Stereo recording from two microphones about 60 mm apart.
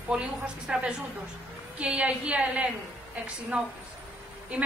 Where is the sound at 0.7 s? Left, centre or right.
Right.